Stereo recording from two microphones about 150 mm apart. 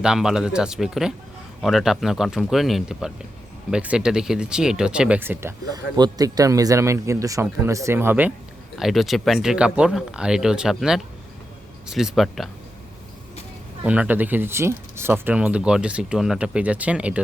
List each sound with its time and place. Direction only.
0.0 s speech: 5° right (ahead or behind)
8.8 s speech: centre (ahead or behind)
13.8 s speech: 10° right (ahead or behind)